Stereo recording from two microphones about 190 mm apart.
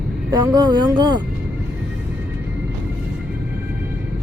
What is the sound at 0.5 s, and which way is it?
Speech, 20° right (ahead or behind).